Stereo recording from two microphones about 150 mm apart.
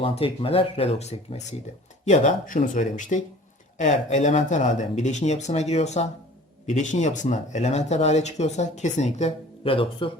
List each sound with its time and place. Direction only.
0.0 s speech: 40° left (ahead or behind)
2.0 s speech: 55° left (ahead or behind); by 10.1 s 35° left (ahead or behind)